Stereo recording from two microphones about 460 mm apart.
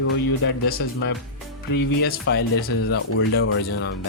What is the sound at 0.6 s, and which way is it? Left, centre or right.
Speech, centre.